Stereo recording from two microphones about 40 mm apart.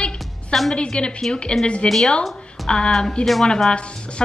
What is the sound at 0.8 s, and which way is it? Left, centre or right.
A woman's voice, left.